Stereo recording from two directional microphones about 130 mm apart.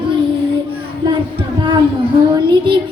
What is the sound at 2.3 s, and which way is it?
Music, 35° right (ahead or behind).